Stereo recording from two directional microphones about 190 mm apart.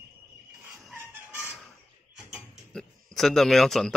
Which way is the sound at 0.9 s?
10° right (ahead or behind).